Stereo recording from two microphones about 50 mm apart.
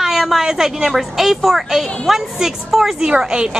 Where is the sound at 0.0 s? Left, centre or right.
Centre.